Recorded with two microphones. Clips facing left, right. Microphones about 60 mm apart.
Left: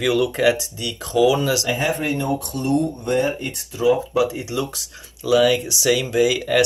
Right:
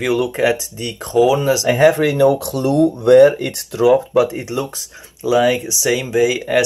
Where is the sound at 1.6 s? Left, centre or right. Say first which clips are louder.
Right 9 dB; right.